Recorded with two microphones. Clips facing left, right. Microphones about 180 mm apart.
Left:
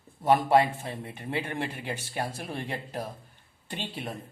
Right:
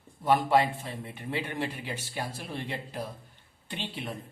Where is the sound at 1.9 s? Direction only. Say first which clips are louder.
Left 3 dB; 50° left (ahead or behind).